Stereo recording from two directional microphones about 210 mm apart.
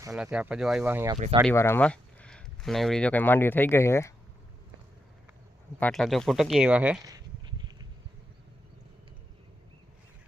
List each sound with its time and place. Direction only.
0.1 s speech: 5° right (ahead or behind)
1.1 s speech: 25° right (ahead or behind)
1.5 s speech: 10° left (ahead or behind)
5.8 s speech: centre (ahead or behind)